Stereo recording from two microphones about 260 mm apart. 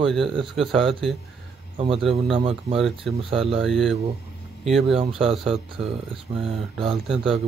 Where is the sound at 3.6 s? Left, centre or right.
Centre.